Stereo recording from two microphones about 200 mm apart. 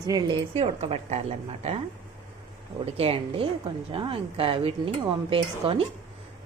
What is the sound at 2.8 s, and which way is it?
A woman's voice, 30° right (ahead or behind).